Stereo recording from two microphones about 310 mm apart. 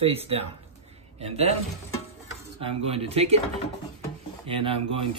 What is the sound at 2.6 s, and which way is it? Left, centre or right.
Speech, centre.